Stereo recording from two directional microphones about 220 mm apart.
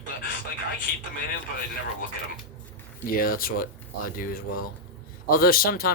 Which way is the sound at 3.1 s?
40° left (ahead or behind).